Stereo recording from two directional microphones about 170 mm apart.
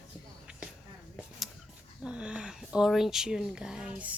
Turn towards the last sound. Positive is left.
turn(degrees=-5)  # may be behind; listen again after turning